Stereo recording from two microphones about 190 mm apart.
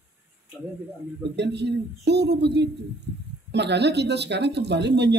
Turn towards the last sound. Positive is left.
turn(degrees=-65)  # may be behind; listen again after turning